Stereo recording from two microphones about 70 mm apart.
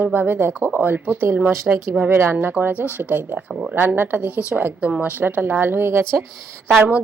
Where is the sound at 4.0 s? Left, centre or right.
Right.